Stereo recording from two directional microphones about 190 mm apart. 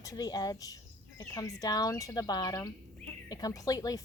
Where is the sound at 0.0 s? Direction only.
20° left (ahead or behind).